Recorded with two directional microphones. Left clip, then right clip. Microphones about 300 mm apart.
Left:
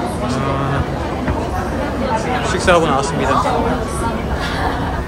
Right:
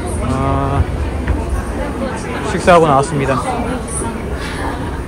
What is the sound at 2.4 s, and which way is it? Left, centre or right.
Speech, right.